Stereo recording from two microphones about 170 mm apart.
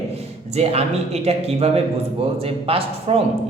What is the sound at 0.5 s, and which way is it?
Speech, 35° right (ahead or behind).